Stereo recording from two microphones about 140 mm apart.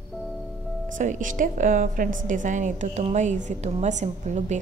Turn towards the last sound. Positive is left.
turn(degrees=-55)  # may be behind; listen again after turning